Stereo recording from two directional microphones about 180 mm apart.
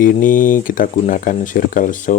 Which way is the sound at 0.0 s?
50° left (ahead or behind).